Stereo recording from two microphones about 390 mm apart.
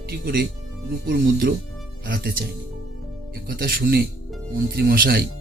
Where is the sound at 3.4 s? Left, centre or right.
Right.